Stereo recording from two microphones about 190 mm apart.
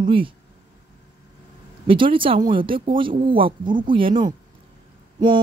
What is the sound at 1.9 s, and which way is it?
Speech, 25° right (ahead or behind).